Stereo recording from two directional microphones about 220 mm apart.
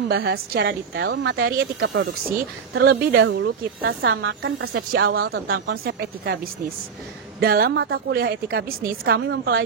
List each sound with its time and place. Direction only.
0.1 s a woman's voice: 45° right (ahead or behind)
4.9 s speech: 45° right (ahead or behind)